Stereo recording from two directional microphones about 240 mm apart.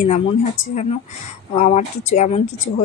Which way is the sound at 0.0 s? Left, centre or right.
Left.